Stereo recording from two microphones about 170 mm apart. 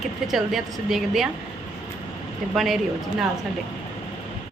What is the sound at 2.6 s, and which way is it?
Speech, centre (ahead or behind).